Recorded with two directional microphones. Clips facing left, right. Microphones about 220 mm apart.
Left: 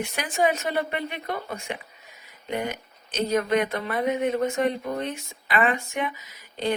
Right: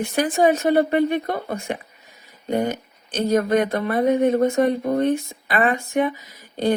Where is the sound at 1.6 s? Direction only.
35° right (ahead or behind).